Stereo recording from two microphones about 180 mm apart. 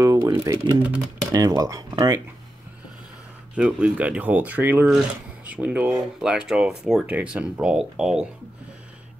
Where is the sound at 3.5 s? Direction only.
5° right (ahead or behind).